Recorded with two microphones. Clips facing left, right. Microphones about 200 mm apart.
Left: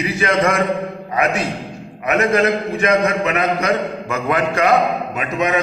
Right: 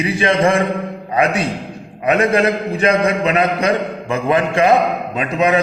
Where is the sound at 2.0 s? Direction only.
30° right (ahead or behind).